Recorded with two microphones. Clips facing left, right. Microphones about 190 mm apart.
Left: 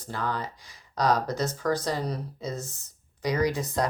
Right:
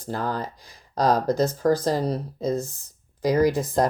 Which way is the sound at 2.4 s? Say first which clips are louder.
Right 9 dB; 55° right (ahead or behind).